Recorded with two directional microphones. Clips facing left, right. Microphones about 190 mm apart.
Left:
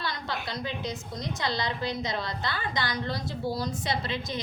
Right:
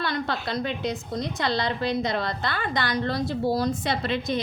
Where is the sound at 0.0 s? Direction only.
60° right (ahead or behind).